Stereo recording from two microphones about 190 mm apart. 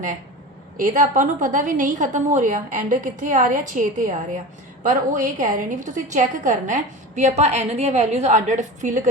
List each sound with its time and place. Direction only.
0.8 s a woman's voice: 45° right (ahead or behind)